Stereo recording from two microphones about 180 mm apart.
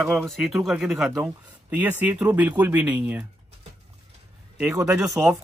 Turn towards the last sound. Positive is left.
turn(degrees=-10)  # may be behind; listen again after turning